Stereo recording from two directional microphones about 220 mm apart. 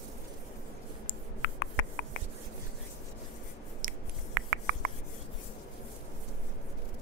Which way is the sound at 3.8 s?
40° right (ahead or behind).